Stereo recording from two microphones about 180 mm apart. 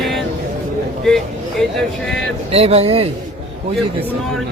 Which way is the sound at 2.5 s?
35° right (ahead or behind).